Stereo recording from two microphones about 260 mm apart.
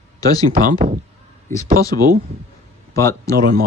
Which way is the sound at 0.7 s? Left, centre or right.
Right.